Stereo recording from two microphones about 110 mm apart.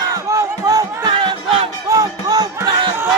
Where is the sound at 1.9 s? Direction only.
35° right (ahead or behind).